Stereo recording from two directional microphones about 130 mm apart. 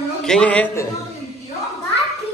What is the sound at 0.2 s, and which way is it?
Speech, 5° left (ahead or behind).